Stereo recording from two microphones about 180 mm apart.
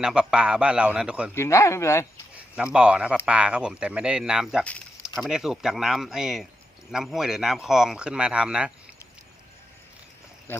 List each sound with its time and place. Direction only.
0.0 s speech: 5° right (ahead or behind)
1.4 s speech: 15° left (ahead or behind)
2.7 s speech: 5° right (ahead or behind)
10.5 s speech: 10° left (ahead or behind)